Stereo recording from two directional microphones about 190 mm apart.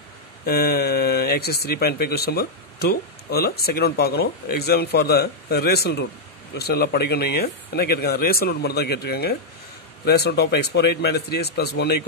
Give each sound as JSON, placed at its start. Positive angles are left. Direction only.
{"t": 0.5, "sound": "speech", "side_deg": 55}